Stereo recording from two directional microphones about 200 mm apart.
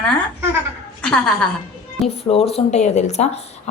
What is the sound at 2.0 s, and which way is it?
Speech, 30° left (ahead or behind).